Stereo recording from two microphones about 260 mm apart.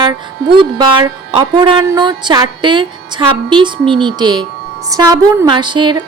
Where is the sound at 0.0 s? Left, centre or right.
Centre.